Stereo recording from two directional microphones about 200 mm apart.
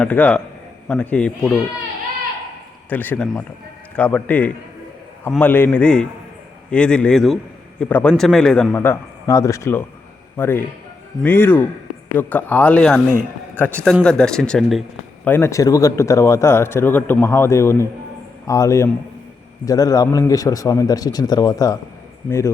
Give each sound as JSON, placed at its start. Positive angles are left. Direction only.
{"t": 0.0, "sound": "speech", "side_deg": 5}
{"t": 2.9, "sound": "a man's voice", "side_deg": 10}
{"t": 15.3, "sound": "speech", "side_deg": 15}